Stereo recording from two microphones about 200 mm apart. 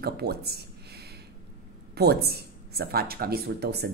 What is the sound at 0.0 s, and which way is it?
Speech, 55° right (ahead or behind).